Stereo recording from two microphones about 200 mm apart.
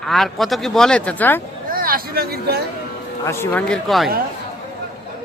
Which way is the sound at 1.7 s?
45° right (ahead or behind).